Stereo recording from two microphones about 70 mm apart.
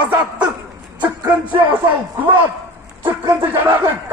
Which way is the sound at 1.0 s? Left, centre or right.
Right.